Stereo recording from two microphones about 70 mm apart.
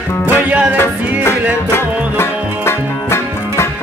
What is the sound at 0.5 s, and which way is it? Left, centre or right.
Music, centre.